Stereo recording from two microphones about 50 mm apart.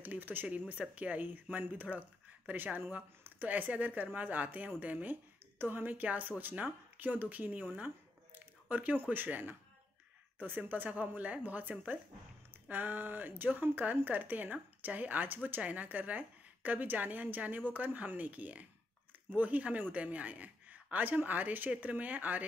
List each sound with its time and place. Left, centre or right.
0.0 s speech: right
8.4 s a sound: right
9.1 s speech: right